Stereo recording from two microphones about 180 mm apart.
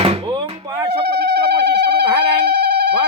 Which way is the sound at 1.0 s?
65° right (ahead or behind).